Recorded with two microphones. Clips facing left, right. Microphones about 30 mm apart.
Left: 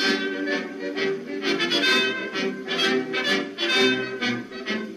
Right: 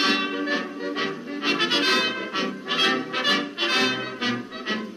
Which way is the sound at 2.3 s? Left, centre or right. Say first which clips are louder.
Even; right.